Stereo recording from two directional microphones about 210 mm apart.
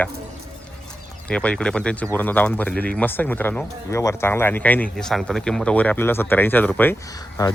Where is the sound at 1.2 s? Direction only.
5° left (ahead or behind).